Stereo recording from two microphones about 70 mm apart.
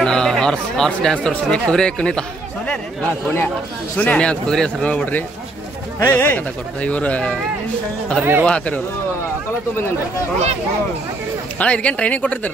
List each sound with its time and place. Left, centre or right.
0.0 s music: centre
1.3 s speech: centre
4.0 s speech: centre
4.8 s speech: left
5.9 s speech: left; by 7.3 s centre
8.2 s speech: right
8.5 s speech: centre
11.5 s speech: centre